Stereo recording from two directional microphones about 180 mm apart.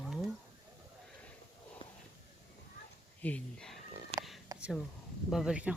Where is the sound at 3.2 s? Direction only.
10° left (ahead or behind).